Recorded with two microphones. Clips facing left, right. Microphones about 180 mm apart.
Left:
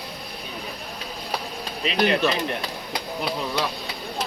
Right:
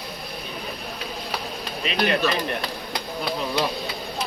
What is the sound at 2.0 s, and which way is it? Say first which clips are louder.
Speech: left 1 dB; 25° left (ahead or behind).